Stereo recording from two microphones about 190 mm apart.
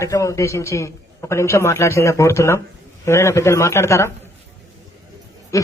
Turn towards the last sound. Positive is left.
turn(degrees=15)  # may be behind; listen again after turning